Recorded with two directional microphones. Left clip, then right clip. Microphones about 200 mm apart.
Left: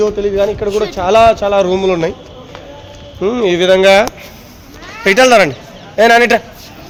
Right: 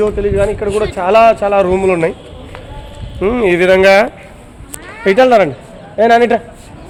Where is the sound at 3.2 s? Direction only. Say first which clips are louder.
Right 1 dB; 15° right (ahead or behind).